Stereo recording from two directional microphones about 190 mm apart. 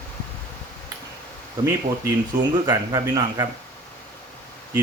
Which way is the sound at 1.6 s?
20° right (ahead or behind).